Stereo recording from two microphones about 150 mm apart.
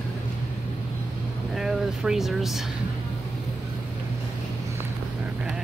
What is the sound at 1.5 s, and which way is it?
Vehicle, 5° right (ahead or behind).